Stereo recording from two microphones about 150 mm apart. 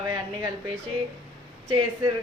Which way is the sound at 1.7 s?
25° right (ahead or behind).